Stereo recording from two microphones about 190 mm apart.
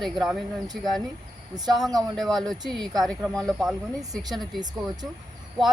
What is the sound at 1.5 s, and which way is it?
Speech, 20° right (ahead or behind).